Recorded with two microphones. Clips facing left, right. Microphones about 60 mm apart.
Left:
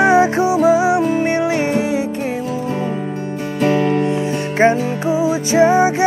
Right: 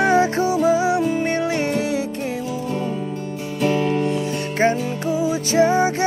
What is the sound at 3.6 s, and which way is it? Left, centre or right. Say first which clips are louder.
Music: left 4 dB; left.